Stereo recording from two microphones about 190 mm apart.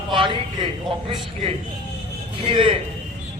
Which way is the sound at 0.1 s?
25° right (ahead or behind).